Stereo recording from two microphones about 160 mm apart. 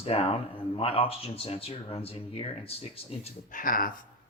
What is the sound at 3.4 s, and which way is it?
Speech, 60° left (ahead or behind).